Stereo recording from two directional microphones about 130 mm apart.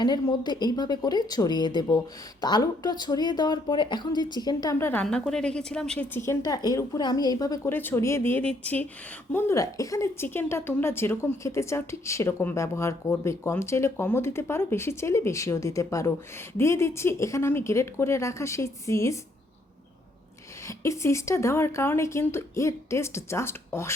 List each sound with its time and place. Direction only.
0.0 s speech: 35° left (ahead or behind); by 5.0 s 20° left (ahead or behind)
5.3 s speech: 5° left (ahead or behind)
6.1 s a woman's voice: 25° left (ahead or behind)
7.7 s a woman's voice: 15° left (ahead or behind)
20.7 s a woman's voice: 25° left (ahead or behind)